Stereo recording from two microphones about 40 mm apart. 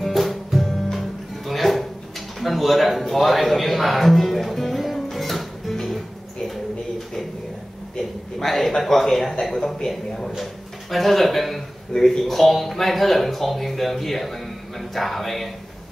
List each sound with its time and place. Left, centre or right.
0.0 s music: centre
8.0 s speech: centre